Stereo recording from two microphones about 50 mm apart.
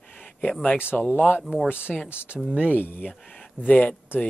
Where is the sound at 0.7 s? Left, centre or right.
Left.